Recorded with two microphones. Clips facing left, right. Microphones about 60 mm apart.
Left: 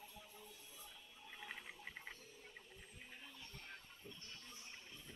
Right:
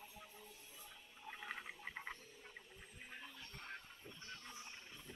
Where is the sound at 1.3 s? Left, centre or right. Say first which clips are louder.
Right 3 dB; centre.